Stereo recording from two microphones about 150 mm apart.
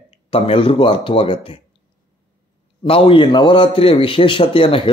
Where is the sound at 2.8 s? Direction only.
35° left (ahead or behind).